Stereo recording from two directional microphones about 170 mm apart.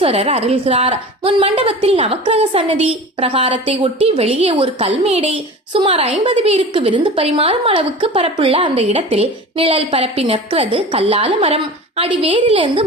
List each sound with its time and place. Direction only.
0.0 s a woman's voice: 35° right (ahead or behind)